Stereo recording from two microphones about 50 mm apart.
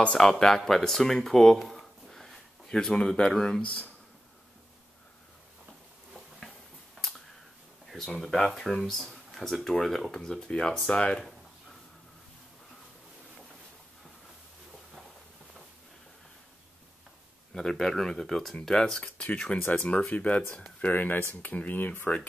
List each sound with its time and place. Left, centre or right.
0.2 s speech: centre
0.6 s a sound: centre
3.1 s speech: centre
7.9 s speech: centre
10.5 s speech: left
17.6 s speech: centre; by 22.2 s left